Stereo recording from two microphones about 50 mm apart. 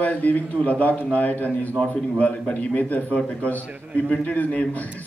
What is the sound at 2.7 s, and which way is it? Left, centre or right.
A man's voice, left.